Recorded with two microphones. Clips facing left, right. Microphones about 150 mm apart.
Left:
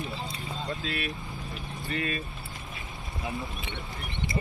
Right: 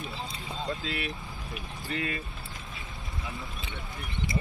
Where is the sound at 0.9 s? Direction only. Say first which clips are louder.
Left 1 dB; 20° right (ahead or behind).